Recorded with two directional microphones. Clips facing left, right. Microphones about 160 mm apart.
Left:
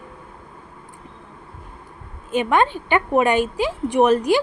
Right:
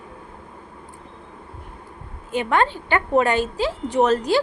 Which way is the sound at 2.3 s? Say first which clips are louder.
Left 2 dB; 20° left (ahead or behind).